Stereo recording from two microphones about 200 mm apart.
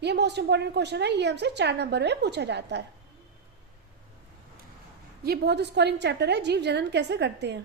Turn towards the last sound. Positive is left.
turn(degrees=-60)  # may be behind; listen again after turning